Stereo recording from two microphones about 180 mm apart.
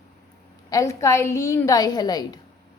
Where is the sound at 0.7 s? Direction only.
15° left (ahead or behind).